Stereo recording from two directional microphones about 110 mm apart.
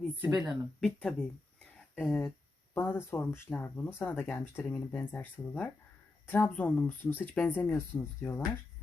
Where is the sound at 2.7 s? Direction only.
20° left (ahead or behind).